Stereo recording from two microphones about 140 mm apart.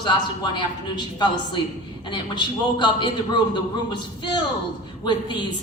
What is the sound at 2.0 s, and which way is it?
A woman's voice, 35° left (ahead or behind).